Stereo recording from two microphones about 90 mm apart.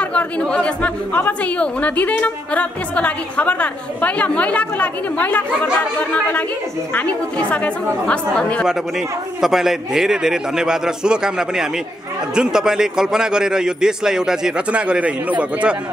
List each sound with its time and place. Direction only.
0.0 s a woman's voice: 15° left (ahead or behind)
9.4 s a man's voice: 5° right (ahead or behind)